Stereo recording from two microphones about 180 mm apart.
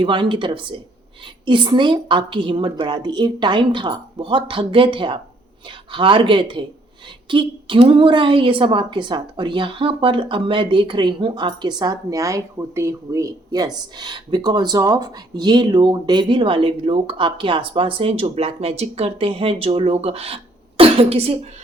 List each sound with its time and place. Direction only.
0.0 s speech: 25° right (ahead or behind)